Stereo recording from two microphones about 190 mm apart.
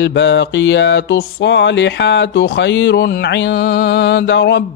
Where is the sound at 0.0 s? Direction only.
70° left (ahead or behind).